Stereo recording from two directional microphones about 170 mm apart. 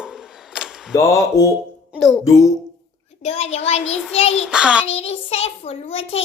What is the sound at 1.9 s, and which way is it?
Music, centre (ahead or behind).